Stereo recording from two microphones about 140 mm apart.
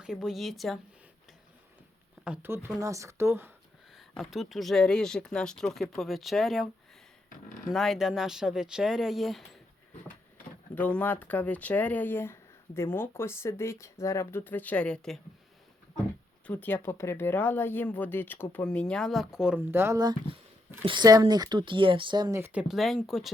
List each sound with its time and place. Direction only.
0.0 s speech: 5° right (ahead or behind)
2.2 s speech: 10° right (ahead or behind)
4.1 s speech: centre (ahead or behind)
7.7 s speech: centre (ahead or behind)
10.8 s speech: 10° left (ahead or behind)
16.5 s speech: 15° left (ahead or behind); by 19.6 s 5° right (ahead or behind)
19.7 s speech: 20° right (ahead or behind)
22.4 s speech: 15° right (ahead or behind)
22.7 s speech: centre (ahead or behind)